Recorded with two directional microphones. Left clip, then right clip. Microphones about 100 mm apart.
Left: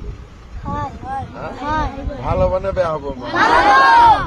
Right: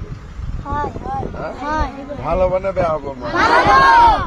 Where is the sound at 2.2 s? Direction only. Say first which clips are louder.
Right 1 dB; 30° left (ahead or behind).